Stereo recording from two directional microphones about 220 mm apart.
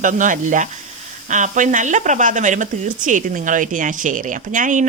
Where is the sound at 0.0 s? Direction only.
35° right (ahead or behind).